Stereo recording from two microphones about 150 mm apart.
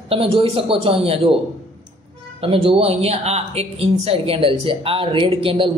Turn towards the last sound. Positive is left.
turn(degrees=-35)  # may be behind; listen again after turning